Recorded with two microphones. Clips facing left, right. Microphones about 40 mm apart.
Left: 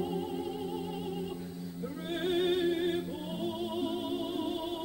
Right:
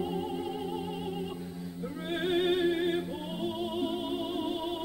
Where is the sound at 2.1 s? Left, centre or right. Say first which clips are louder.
Right 2 dB; centre.